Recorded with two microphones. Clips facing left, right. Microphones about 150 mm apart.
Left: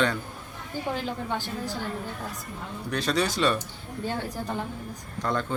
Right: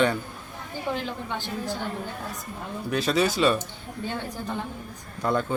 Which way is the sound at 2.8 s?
5° right (ahead or behind).